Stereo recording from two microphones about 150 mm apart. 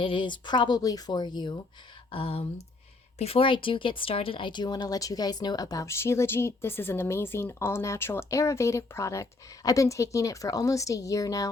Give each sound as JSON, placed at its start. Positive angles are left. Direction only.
{"t": 0.0, "sound": "speech", "side_deg": 35}
{"t": 2.0, "sound": "a sound", "side_deg": 40}
{"t": 3.2, "sound": "speech", "side_deg": 40}